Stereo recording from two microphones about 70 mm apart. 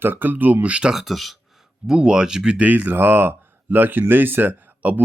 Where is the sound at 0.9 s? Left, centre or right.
Centre; by 5.0 s right.